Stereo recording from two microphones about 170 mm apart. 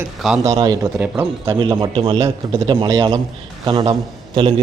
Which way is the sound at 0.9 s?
10° right (ahead or behind).